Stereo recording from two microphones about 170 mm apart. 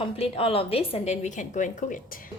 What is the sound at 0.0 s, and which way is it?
A woman's voice, 35° left (ahead or behind).